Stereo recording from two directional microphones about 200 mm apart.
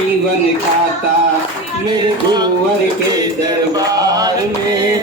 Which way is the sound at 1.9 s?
20° right (ahead or behind).